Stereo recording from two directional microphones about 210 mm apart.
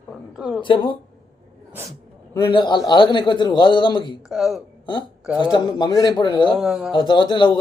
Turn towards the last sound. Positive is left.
turn(degrees=20)  # may be behind; listen again after turning